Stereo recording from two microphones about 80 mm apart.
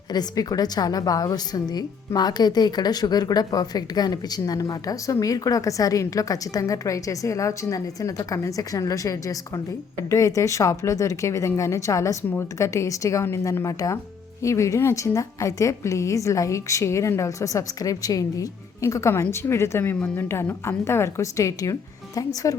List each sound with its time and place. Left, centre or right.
0.1 s a woman's voice: left
19.8 s a woman's voice: left